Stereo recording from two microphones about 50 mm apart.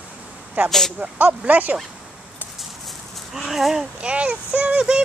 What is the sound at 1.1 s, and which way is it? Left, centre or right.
Speech, right.